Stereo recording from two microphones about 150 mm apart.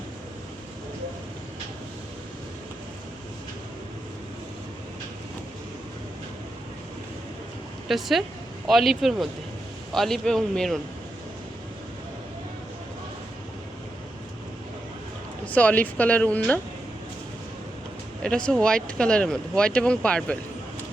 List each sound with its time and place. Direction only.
7.9 s speech: centre (ahead or behind)
15.4 s speech: 10° left (ahead or behind)
18.2 s speech: 5° left (ahead or behind)